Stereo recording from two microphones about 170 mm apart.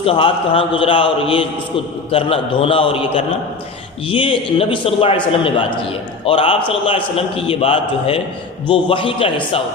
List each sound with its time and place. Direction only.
0.0 s a man's voice: 35° left (ahead or behind)